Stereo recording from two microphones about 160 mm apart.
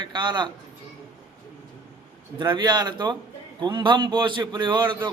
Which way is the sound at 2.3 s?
30° right (ahead or behind).